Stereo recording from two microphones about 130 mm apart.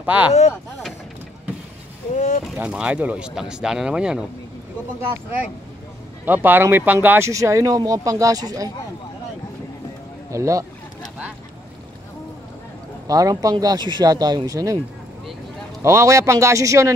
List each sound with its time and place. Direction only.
0.0 s speech: 10° right (ahead or behind)
2.1 s speech: 75° left (ahead or behind)
2.6 s speech: 10° right (ahead or behind)
6.2 s speech: 15° right (ahead or behind)
10.3 s speech: 25° right (ahead or behind)
13.0 s speech: 25° right (ahead or behind)
15.8 s speech: 20° right (ahead or behind)